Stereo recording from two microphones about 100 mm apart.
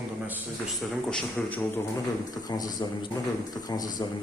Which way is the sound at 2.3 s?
40° left (ahead or behind).